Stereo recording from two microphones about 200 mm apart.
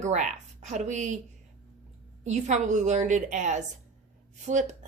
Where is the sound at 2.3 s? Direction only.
35° right (ahead or behind).